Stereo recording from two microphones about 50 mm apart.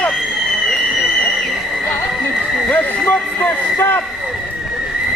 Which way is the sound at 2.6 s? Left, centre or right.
Left.